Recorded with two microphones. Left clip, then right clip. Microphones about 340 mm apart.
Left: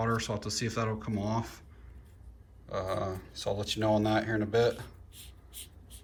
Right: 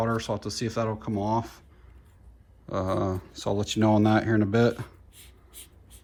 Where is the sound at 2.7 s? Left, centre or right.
Centre.